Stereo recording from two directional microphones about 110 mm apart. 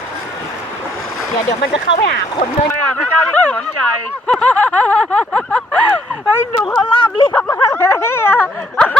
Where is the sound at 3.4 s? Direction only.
10° left (ahead or behind).